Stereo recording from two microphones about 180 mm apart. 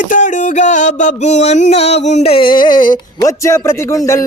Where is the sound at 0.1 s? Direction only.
45° left (ahead or behind).